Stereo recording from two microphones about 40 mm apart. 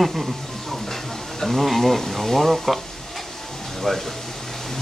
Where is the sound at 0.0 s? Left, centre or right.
Centre.